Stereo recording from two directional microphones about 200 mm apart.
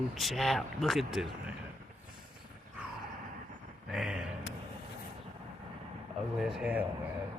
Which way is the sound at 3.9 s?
5° right (ahead or behind).